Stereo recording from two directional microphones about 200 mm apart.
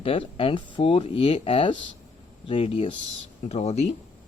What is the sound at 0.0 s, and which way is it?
Speech, 25° left (ahead or behind).